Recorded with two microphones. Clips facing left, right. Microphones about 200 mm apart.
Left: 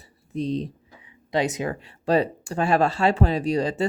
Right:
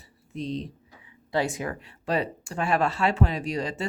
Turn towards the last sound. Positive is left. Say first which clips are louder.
# left 6 dB
turn(degrees=35)  # may be behind; listen again after turning